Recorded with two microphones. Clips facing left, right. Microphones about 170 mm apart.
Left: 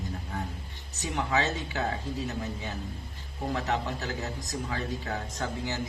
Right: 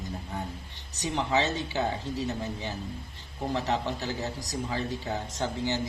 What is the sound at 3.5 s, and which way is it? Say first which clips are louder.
A man's voice: right 2 dB; 30° right (ahead or behind).